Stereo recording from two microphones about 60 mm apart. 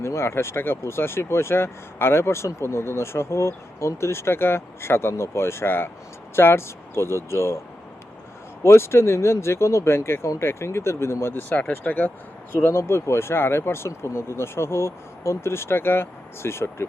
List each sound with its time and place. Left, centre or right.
0.0 s speech: left
8.6 s speech: left
12.5 s speech: left